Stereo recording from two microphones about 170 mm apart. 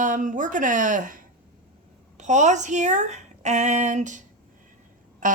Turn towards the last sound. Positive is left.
turn(degrees=-50)  # may be behind; listen again after turning